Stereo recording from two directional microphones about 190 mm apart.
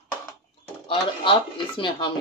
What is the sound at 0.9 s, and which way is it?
Speech, 25° left (ahead or behind).